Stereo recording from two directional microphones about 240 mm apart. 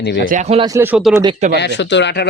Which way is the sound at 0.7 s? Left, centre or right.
Centre.